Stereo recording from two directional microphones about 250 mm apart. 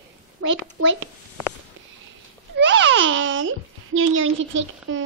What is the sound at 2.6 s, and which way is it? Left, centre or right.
Babbling, right.